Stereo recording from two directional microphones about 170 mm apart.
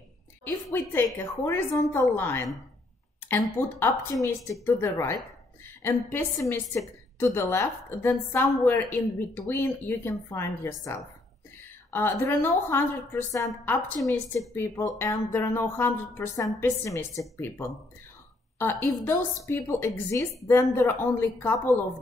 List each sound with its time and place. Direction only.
0.7 s a woman's voice: 15° left (ahead or behind)
14.5 s a woman's voice: 15° left (ahead or behind)